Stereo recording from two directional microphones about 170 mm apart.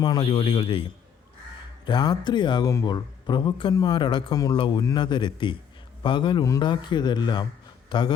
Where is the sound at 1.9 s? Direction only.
25° left (ahead or behind).